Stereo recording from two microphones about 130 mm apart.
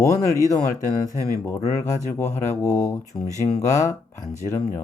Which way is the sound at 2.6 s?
10° left (ahead or behind).